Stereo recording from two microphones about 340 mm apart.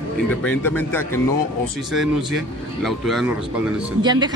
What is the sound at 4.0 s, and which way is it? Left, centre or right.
Speech, centre.